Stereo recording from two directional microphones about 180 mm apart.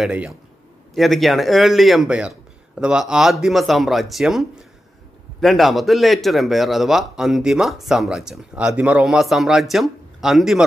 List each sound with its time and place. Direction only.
0.0 s a man's voice: 5° right (ahead or behind)